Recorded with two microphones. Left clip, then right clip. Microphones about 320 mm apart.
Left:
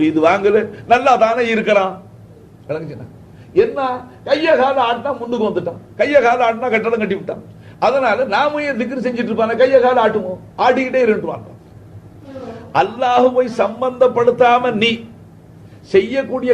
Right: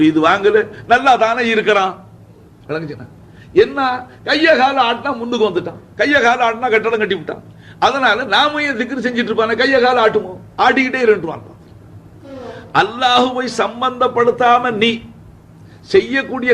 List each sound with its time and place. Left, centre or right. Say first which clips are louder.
0.0 s a man's voice: right 1 dB; right
12.7 s a man's voice: right 1 dB; right